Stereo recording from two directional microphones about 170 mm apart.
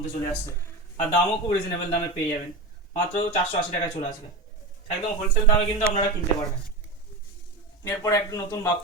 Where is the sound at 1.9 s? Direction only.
20° left (ahead or behind).